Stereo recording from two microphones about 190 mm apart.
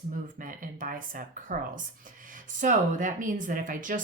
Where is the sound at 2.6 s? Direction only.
40° right (ahead or behind).